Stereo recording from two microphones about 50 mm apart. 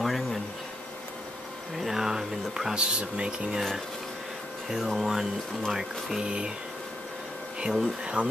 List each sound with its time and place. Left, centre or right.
0.0 s insect: centre
1.8 s a sound: centre
2.8 s speech: centre
4.6 s speech: centre
7.6 s speech: centre
8.0 s speech: right